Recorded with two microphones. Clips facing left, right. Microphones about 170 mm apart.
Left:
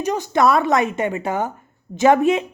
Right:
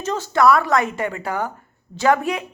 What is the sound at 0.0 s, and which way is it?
Speech, 15° left (ahead or behind).